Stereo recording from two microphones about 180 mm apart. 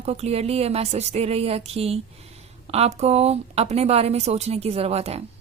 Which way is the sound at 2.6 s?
35° right (ahead or behind).